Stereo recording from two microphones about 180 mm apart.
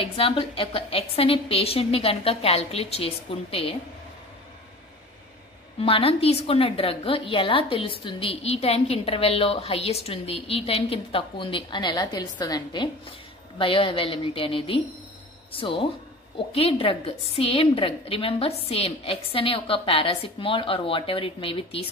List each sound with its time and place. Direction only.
0.0 s a woman's voice: 30° left (ahead or behind)
5.8 s a woman's voice: 30° left (ahead or behind)